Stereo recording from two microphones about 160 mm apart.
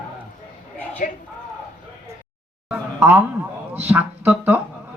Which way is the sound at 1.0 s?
60° left (ahead or behind).